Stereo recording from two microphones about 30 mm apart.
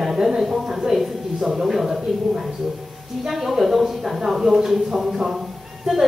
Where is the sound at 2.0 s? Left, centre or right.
Centre.